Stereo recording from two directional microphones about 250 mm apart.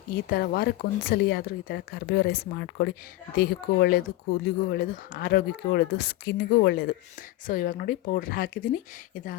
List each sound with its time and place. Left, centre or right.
0.3 s speech: left